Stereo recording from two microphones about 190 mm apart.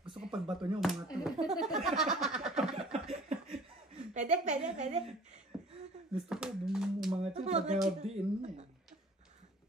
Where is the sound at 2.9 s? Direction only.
35° right (ahead or behind).